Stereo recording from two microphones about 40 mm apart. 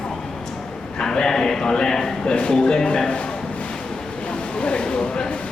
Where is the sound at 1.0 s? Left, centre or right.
Centre.